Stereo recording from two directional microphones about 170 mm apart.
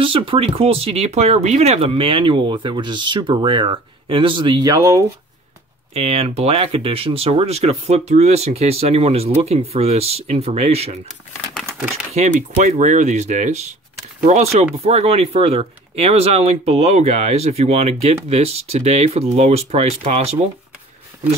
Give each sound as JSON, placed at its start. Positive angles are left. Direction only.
{"t": 0.0, "sound": "speech", "side_deg": -30}
{"t": 5.9, "sound": "speech", "side_deg": -35}
{"t": 12.1, "sound": "speech", "side_deg": -45}